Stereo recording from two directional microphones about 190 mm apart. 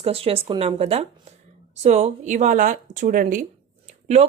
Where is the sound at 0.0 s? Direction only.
30° right (ahead or behind).